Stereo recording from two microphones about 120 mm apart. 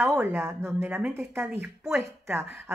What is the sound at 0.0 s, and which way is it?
A woman's voice, 10° right (ahead or behind).